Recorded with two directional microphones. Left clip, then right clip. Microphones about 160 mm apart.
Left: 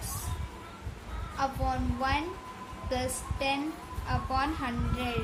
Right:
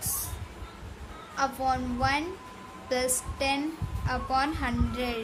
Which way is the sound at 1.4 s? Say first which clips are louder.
Right 4 dB; 55° right (ahead or behind).